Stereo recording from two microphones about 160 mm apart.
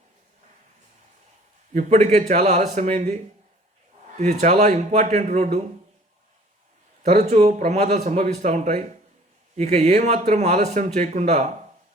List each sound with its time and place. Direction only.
1.9 s speech: 45° right (ahead or behind)
4.2 s speech: 45° right (ahead or behind)
7.0 s speech: 45° right (ahead or behind)